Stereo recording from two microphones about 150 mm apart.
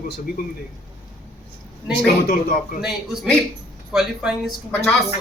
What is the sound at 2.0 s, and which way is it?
Speech, 65° left (ahead or behind).